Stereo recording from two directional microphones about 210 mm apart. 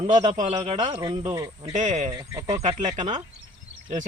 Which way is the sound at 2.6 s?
30° right (ahead or behind).